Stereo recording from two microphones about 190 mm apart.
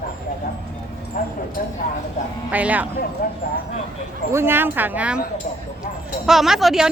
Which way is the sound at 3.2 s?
50° left (ahead or behind).